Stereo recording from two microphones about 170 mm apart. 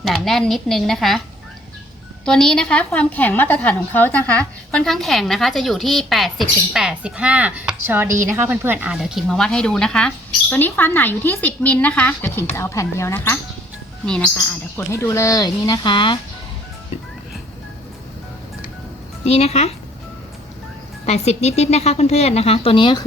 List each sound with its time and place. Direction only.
0.0 s a woman's voice: centre (ahead or behind)
2.2 s a woman's voice: 5° left (ahead or behind)
14.8 s speech: 15° left (ahead or behind)
19.2 s a woman's voice: 40° left (ahead or behind)
21.1 s a woman's voice: 40° left (ahead or behind)